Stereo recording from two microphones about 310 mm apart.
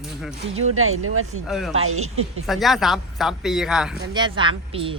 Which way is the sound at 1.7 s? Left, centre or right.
Right.